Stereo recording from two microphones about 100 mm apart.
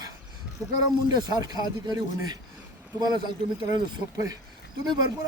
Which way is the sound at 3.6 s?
50° right (ahead or behind).